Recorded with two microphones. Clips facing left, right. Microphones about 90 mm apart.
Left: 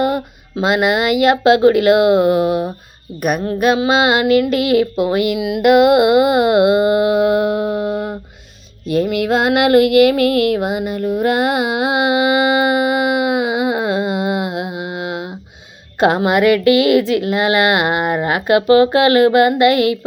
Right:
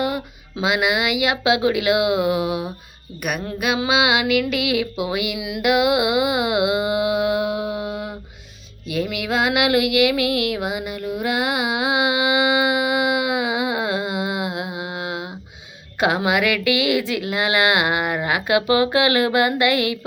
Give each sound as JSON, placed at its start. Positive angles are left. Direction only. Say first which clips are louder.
{"t": 0.0, "sound": "a woman's voice", "louder": "left 6 dB", "side_deg": 45}
{"t": 3.8, "sound": "a sound", "louder": "left 5 dB", "side_deg": 40}
{"t": 16.0, "sound": "a woman's voice", "louder": "left 6 dB", "side_deg": 40}